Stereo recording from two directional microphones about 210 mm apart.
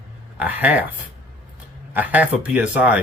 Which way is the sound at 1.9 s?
10° right (ahead or behind).